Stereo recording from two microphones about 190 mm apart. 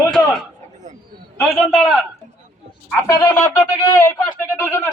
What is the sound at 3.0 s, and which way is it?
Speech, 15° left (ahead or behind).